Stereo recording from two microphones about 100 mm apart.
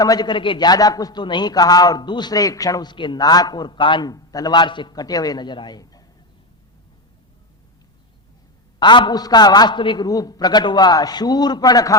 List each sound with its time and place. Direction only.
0.0 s a man's voice: 40° left (ahead or behind)
2.9 s a man's voice: 50° left (ahead or behind)
4.1 s a man's voice: 35° left (ahead or behind)
8.8 s a man's voice: 50° left (ahead or behind)
10.1 s a man's voice: 40° left (ahead or behind)